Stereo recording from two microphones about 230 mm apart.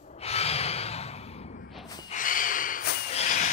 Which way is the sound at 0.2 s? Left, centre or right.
Left.